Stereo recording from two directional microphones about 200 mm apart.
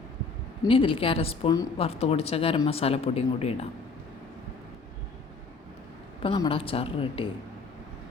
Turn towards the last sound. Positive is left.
turn(degrees=25)  # may be behind; listen again after turning